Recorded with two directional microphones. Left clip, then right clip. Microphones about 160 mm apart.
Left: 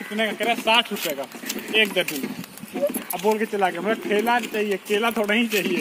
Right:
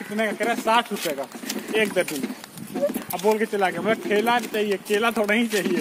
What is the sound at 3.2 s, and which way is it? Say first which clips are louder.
Speech: even; 20° left (ahead or behind).